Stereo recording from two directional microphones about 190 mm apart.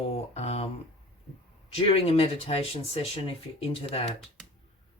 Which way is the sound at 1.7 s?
30° left (ahead or behind).